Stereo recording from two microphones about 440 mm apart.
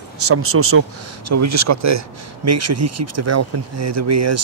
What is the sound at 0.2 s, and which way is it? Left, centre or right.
Speech, right.